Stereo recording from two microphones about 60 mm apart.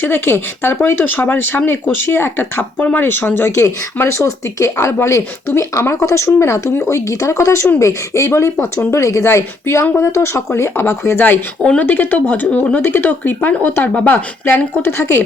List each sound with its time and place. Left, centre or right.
0.0 s speech: left
7.1 s speech: left
11.2 s speech: left
11.6 s speech: left
14.8 s speech: left